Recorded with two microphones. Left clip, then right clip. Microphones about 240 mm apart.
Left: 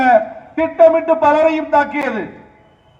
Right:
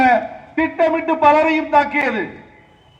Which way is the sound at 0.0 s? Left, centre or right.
Left.